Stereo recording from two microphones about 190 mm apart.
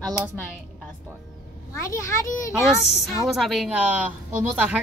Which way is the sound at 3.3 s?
Centre (ahead or behind).